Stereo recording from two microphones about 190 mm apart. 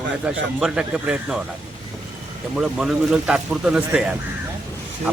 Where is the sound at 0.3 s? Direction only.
5° right (ahead or behind).